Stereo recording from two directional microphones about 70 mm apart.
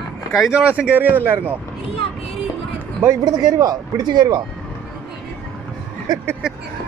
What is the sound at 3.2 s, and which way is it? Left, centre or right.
Speech, right.